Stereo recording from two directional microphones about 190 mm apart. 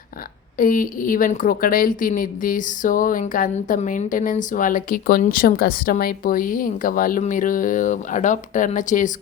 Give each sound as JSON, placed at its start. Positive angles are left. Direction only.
{"t": 0.5, "sound": "a woman's voice", "side_deg": 45}